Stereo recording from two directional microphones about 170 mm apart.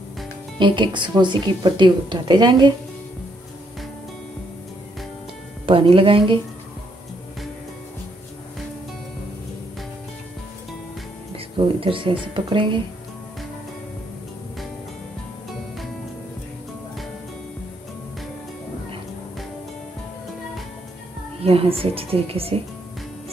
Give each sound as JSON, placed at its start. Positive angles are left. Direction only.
{"t": 0.6, "sound": "speech", "side_deg": -30}
{"t": 5.7, "sound": "a woman's voice", "side_deg": -30}
{"t": 11.3, "sound": "speech", "side_deg": -30}
{"t": 21.4, "sound": "a woman's voice", "side_deg": -35}